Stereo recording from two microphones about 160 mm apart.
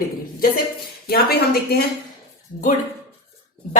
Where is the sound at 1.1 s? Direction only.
75° left (ahead or behind).